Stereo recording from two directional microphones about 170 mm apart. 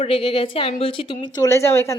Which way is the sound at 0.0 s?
30° left (ahead or behind).